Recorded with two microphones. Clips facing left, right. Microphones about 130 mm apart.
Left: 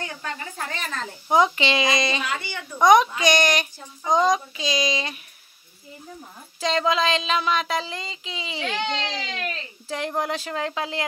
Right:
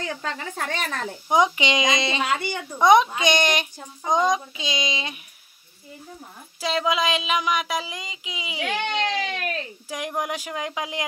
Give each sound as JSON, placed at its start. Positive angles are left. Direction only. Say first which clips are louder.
{"t": 0.0, "sound": "a woman's voice", "louder": "right 3 dB", "side_deg": -90}
{"t": 1.3, "sound": "speech", "louder": "left 1 dB", "side_deg": -15}
{"t": 6.6, "sound": "child singing", "louder": "left 1 dB", "side_deg": -10}
{"t": 8.7, "sound": "speech", "louder": "right 4 dB", "side_deg": -55}
{"t": 9.8, "sound": "child singing", "louder": "left 3 dB", "side_deg": -10}